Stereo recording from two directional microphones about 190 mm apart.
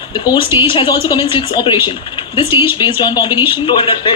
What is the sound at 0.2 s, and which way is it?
A man's voice, 25° left (ahead or behind).